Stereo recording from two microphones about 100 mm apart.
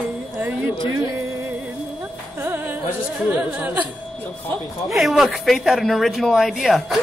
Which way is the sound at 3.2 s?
15° right (ahead or behind).